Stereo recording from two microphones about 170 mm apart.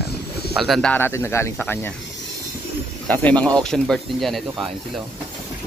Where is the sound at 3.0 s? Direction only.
10° left (ahead or behind).